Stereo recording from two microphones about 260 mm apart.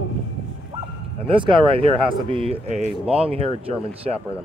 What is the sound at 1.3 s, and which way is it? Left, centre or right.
Speech, centre.